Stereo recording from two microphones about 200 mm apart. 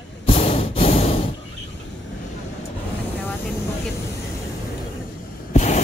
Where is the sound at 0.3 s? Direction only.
30° left (ahead or behind).